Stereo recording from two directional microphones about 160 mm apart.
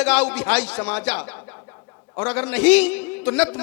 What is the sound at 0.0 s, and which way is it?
A man's voice, 5° left (ahead or behind).